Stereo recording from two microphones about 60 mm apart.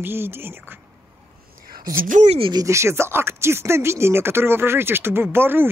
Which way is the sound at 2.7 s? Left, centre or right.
Right.